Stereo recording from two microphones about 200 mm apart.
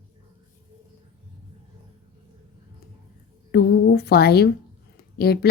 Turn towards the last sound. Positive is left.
turn(degrees=50)  # may be behind; listen again after turning